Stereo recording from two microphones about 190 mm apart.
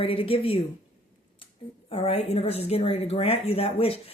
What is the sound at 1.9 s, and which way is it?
A woman's voice, 30° left (ahead or behind).